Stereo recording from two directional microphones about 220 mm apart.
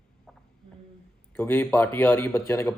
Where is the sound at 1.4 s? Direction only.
10° left (ahead or behind).